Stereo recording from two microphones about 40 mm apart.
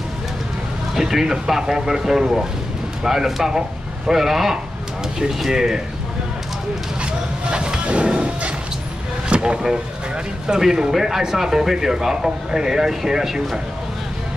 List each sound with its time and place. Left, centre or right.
0.9 s speech: centre
7.0 s a sound: right
9.3 s vehicle: right
10.4 s speech: centre